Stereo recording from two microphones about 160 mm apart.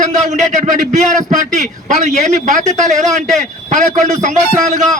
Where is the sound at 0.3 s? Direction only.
50° right (ahead or behind).